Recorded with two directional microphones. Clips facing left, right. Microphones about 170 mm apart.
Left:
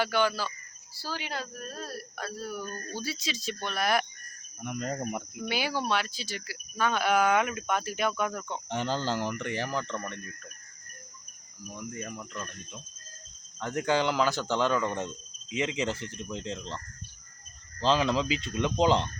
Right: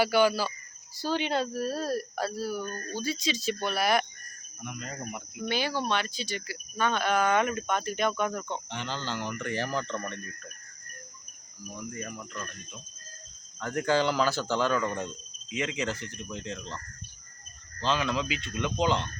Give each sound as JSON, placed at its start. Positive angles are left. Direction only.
{"t": 0.0, "sound": "speech", "side_deg": -10}
{"t": 0.9, "sound": "speech", "side_deg": -20}
{"t": 2.3, "sound": "speech", "side_deg": -5}
{"t": 2.9, "sound": "speech", "side_deg": 5}
{"t": 4.6, "sound": "speech", "side_deg": 50}
{"t": 5.5, "sound": "speech", "side_deg": 10}
{"t": 8.7, "sound": "speech", "side_deg": 45}
{"t": 9.4, "sound": "speech", "side_deg": 15}
{"t": 11.8, "sound": "speech", "side_deg": 20}
{"t": 13.6, "sound": "speech", "side_deg": 20}